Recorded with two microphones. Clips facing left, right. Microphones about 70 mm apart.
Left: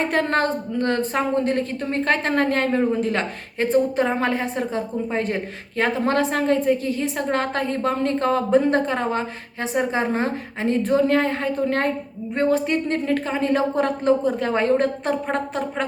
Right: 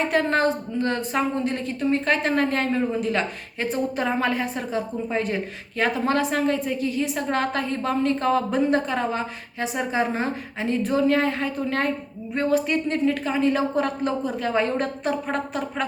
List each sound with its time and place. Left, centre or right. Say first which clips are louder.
0.1 s a woman's voice: even; left